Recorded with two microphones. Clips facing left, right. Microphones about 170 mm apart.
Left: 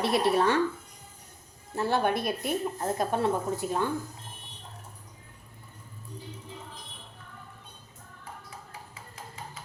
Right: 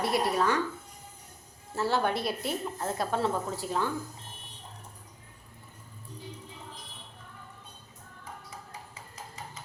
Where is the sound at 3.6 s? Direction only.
20° left (ahead or behind).